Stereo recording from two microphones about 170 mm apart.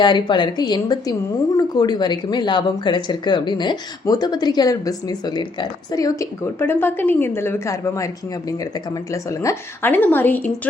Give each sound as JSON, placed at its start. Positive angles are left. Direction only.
{"t": 0.0, "sound": "speech", "side_deg": 25}